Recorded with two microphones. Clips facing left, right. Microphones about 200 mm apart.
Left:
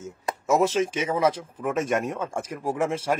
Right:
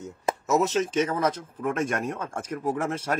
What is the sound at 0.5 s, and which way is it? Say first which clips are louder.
Speech: left 3 dB; 10° left (ahead or behind).